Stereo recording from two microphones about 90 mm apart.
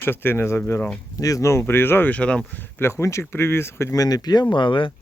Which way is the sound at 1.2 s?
40° left (ahead or behind).